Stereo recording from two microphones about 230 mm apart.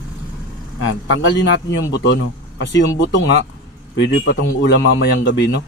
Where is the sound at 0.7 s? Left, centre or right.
Left.